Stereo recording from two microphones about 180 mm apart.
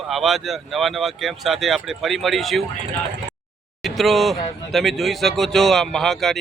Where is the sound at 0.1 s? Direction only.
Centre (ahead or behind).